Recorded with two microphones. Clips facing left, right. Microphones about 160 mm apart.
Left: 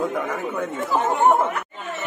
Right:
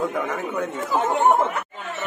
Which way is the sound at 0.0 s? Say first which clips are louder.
Even; centre (ahead or behind).